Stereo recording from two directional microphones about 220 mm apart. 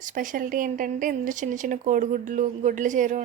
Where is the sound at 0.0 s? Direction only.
35° right (ahead or behind).